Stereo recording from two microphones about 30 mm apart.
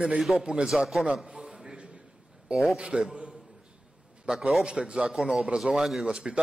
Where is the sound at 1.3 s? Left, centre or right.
Centre.